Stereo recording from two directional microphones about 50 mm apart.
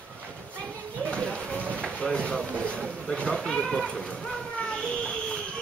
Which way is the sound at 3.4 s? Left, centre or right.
Centre.